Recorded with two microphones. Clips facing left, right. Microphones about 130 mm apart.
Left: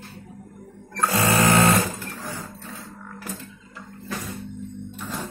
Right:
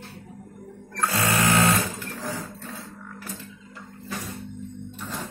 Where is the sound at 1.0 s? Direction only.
20° left (ahead or behind).